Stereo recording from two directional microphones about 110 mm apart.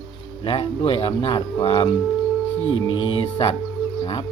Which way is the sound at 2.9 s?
50° left (ahead or behind).